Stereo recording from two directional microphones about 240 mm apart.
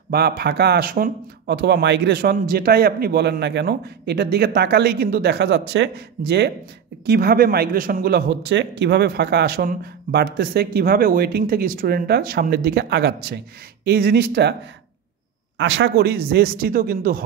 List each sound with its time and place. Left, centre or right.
0.1 s speech: right
15.5 s speech: right